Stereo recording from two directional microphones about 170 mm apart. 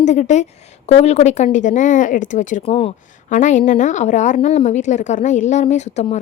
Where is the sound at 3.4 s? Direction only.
50° left (ahead or behind).